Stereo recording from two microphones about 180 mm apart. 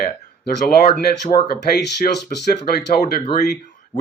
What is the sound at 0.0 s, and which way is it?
Speech, 55° left (ahead or behind).